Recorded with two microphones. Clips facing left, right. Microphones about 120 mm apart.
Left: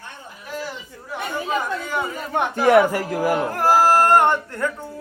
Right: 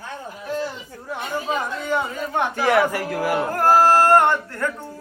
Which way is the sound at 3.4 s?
Centre (ahead or behind).